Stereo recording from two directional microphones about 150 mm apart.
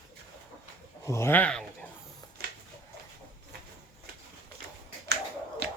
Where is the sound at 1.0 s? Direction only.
20° left (ahead or behind).